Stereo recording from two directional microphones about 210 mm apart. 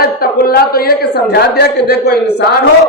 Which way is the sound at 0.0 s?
45° left (ahead or behind).